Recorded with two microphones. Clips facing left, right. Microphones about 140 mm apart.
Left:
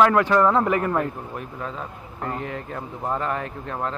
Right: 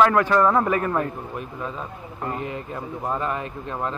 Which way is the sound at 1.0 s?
15° right (ahead or behind).